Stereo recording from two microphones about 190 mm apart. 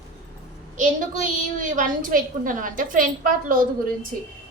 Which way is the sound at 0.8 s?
40° right (ahead or behind).